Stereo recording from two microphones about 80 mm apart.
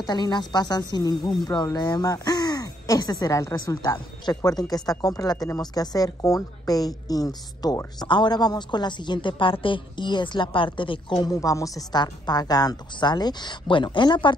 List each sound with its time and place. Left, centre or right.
0.0 s a woman's voice: left
3.5 s a woman's voice: left
8.1 s a woman's voice: left
11.3 s a woman's voice: left